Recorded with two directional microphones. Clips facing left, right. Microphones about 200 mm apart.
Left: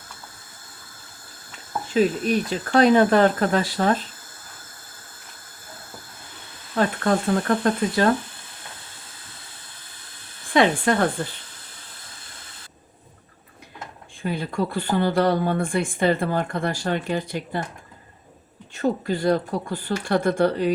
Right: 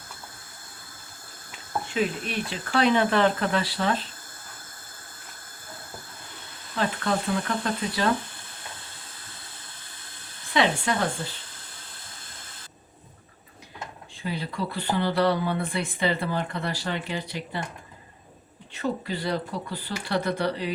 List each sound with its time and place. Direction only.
1.9 s speech: 40° left (ahead or behind)
6.7 s speech: 50° left (ahead or behind)
10.5 s speech: 50° left (ahead or behind)
14.2 s speech: 50° left (ahead or behind)
18.7 s speech: 45° left (ahead or behind)